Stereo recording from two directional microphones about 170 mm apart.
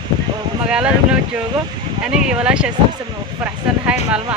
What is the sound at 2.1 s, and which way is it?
Speech, 5° right (ahead or behind).